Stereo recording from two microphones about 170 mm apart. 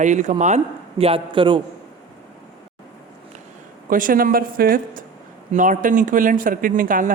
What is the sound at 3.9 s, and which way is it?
Speech, 55° right (ahead or behind).